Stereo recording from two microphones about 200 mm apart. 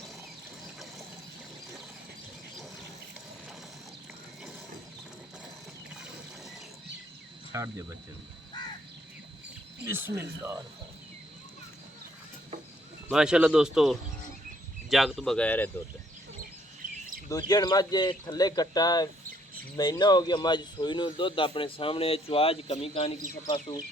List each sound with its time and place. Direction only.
7.5 s speech: 15° right (ahead or behind)
9.8 s speech: 10° right (ahead or behind)
13.1 s speech: 5° right (ahead or behind)
17.2 s speech: 20° left (ahead or behind)